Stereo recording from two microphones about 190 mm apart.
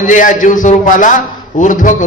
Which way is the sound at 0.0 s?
45° left (ahead or behind).